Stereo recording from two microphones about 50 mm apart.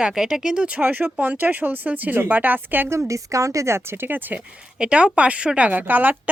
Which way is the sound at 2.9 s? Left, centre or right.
Right.